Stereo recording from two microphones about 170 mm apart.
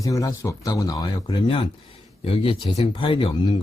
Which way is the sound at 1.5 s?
30° left (ahead or behind).